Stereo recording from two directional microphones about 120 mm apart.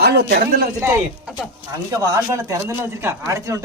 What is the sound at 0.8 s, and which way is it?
Speech, 20° right (ahead or behind).